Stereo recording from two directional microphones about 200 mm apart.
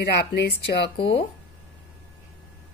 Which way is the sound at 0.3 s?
50° left (ahead or behind).